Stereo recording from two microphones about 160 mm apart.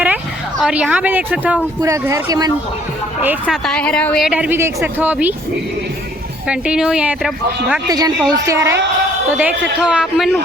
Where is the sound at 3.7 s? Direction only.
5° left (ahead or behind); by 5.3 s 10° right (ahead or behind).